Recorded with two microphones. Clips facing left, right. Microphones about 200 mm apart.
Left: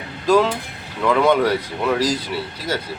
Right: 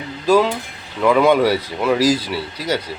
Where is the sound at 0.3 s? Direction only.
10° right (ahead or behind).